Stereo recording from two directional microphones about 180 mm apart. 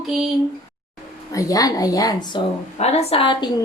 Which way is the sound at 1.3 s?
20° left (ahead or behind).